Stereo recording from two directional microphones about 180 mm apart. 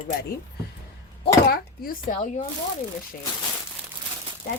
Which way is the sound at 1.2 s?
55° left (ahead or behind).